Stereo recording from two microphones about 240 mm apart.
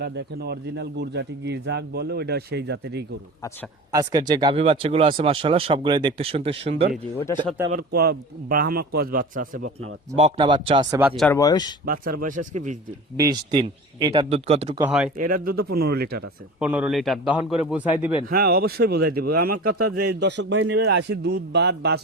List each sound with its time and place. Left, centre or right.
0.0 s a man's voice: right
3.9 s speech: centre
7.3 s speech: centre
7.7 s speech: right
10.2 s speech: right
11.2 s speech: centre
13.1 s speech: centre
14.8 s a man's voice: centre
15.2 s speech: right
16.6 s a man's voice: centre
18.3 s speech: right